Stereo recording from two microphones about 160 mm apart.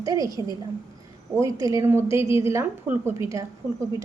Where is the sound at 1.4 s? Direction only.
20° right (ahead or behind).